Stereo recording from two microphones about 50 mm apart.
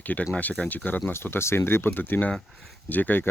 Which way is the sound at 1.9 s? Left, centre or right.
Left.